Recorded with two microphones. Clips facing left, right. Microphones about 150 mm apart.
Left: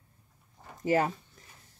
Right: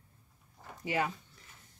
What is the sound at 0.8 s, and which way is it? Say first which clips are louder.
Speech: left 7 dB; 40° left (ahead or behind).